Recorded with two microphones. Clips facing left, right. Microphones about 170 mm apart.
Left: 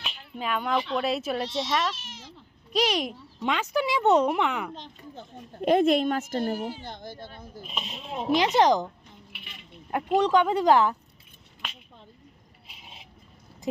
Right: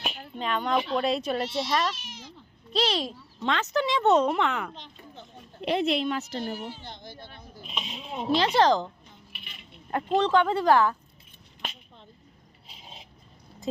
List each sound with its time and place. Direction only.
0.0 s a sound: 45° right (ahead or behind)
0.3 s speech: 5° left (ahead or behind)
2.7 s speech: 15° left (ahead or behind)
4.7 s speech: 45° left (ahead or behind)
7.6 s speech: centre (ahead or behind)
8.4 s speech: 15° left (ahead or behind)
9.9 s speech: 10° left (ahead or behind)